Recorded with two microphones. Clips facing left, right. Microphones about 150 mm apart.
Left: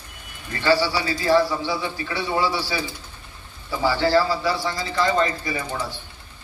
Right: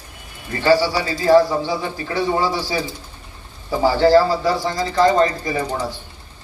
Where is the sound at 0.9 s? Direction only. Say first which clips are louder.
Right 5 dB; 40° right (ahead or behind).